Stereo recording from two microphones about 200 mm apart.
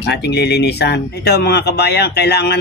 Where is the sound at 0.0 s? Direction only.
55° left (ahead or behind).